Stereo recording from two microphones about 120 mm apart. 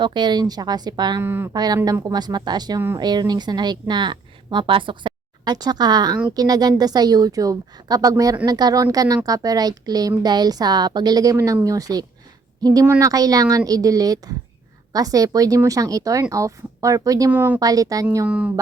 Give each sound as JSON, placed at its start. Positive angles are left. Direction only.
{"t": 0.0, "sound": "speech", "side_deg": -40}
{"t": 1.2, "sound": "speech", "side_deg": -20}
{"t": 1.5, "sound": "a woman's voice", "side_deg": -35}
{"t": 17.3, "sound": "speech", "side_deg": -15}
{"t": 17.6, "sound": "speech", "side_deg": -30}
{"t": 18.3, "sound": "speech", "side_deg": -10}